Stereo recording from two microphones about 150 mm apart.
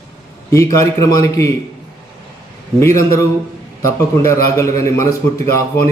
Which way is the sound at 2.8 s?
20° left (ahead or behind).